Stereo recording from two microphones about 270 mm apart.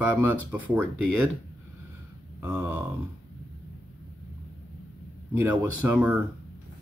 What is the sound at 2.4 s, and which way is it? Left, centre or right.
Speech, centre.